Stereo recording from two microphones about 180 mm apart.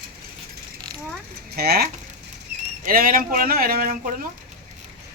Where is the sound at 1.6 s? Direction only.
60° right (ahead or behind).